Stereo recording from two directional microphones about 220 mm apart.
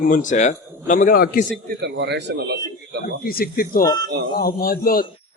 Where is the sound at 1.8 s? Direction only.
50° right (ahead or behind).